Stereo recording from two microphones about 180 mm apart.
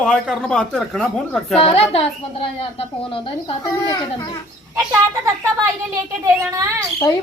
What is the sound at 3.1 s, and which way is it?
Speech, 30° left (ahead or behind).